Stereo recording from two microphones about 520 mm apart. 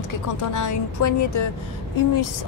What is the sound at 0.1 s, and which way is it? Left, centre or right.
A woman's voice, left.